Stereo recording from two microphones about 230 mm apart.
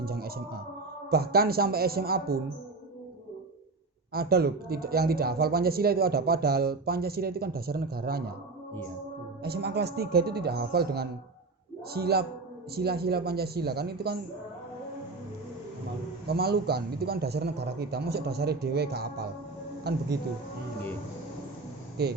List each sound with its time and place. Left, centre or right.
0.0 s a man's voice: right
4.1 s a man's voice: right
9.4 s a man's voice: right
16.2 s a man's voice: right
22.0 s a man's voice: right